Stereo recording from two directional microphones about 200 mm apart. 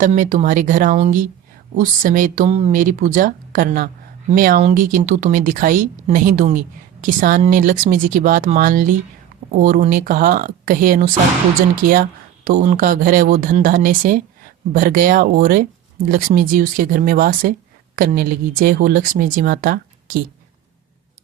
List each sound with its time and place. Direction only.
0.0 s speech: 40° right (ahead or behind)